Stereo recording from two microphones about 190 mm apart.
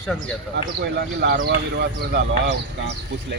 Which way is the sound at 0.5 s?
55° right (ahead or behind).